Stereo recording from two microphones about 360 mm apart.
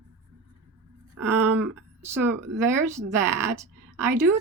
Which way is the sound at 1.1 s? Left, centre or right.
Right.